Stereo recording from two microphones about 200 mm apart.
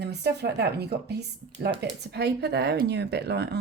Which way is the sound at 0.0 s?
55° right (ahead or behind).